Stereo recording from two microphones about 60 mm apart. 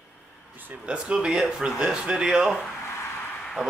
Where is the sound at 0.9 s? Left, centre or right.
Centre.